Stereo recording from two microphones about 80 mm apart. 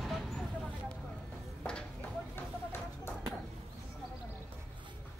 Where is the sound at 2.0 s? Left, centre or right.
Left.